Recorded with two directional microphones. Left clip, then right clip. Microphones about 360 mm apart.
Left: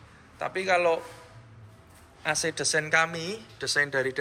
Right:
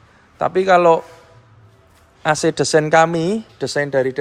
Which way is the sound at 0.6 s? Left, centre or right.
Right.